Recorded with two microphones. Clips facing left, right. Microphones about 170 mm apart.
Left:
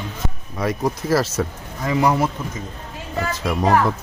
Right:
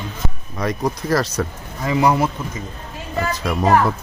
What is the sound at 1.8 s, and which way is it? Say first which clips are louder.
Speech: right 1 dB; 15° right (ahead or behind).